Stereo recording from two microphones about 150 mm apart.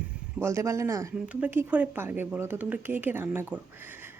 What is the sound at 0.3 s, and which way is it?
Speech, 20° right (ahead or behind).